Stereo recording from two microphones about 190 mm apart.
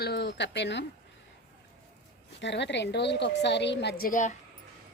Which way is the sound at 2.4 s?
65° left (ahead or behind).